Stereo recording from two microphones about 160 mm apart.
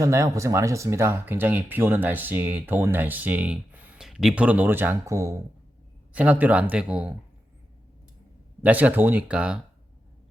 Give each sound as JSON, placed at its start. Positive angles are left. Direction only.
{"t": 0.0, "sound": "speech", "side_deg": -20}
{"t": 8.6, "sound": "speech", "side_deg": -10}